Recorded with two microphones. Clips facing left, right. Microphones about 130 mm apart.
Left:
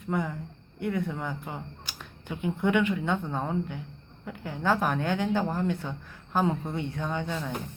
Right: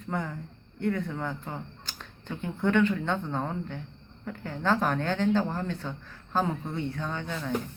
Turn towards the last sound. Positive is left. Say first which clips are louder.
# left 2 dB
turn(degrees=15)  # may be behind; listen again after turning